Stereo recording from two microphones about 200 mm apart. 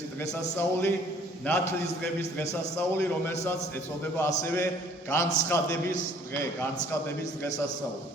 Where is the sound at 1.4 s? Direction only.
10° left (ahead or behind).